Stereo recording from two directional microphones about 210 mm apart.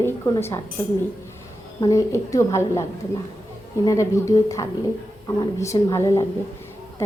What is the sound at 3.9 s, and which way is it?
A woman's voice, 15° left (ahead or behind).